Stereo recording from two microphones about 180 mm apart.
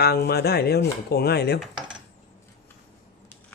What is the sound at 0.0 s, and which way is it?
Speech, 60° left (ahead or behind).